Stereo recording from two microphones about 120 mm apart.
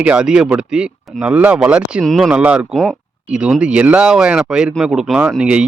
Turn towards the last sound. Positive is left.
turn(degrees=-10)  # may be behind; listen again after turning